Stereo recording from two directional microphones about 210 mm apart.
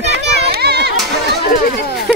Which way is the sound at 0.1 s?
50° right (ahead or behind).